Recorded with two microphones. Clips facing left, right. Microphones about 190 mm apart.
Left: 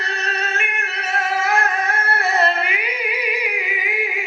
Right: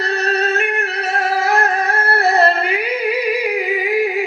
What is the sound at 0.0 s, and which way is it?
Singing, 35° right (ahead or behind).